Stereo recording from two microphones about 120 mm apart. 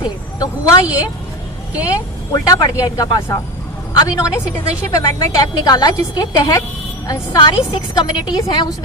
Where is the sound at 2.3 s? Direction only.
30° left (ahead or behind).